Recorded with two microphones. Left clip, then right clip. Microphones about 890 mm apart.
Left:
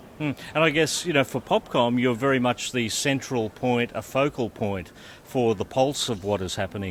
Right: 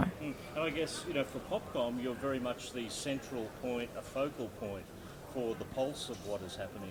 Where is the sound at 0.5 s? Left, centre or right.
Left.